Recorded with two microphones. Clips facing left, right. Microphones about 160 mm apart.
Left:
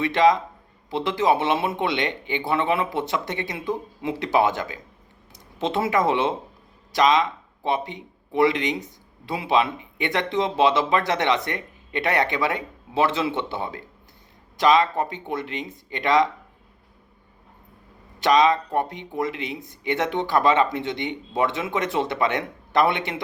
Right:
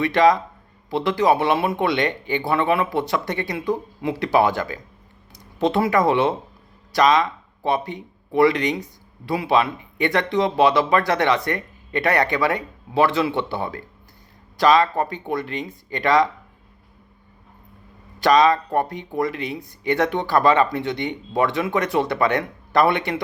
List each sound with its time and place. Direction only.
0.0 s speech: 20° left (ahead or behind)
18.2 s speech: 20° left (ahead or behind)